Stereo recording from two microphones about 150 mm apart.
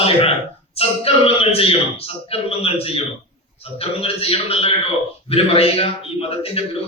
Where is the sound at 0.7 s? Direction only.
40° left (ahead or behind).